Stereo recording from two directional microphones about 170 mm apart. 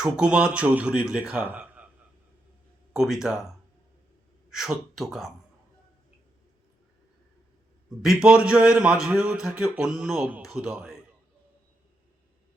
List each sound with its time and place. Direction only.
0.0 s speech: 5° right (ahead or behind)
2.9 s a man's voice: centre (ahead or behind)
7.9 s a man's voice: centre (ahead or behind)